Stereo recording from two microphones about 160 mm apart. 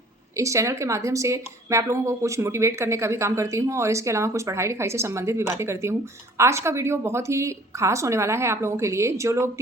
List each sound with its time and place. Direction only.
0.3 s speech: 20° right (ahead or behind)